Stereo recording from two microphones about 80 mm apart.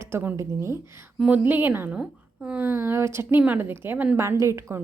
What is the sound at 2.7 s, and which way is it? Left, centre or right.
A woman's voice, right.